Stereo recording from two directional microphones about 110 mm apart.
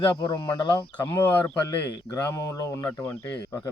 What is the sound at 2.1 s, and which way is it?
Speech, 30° left (ahead or behind).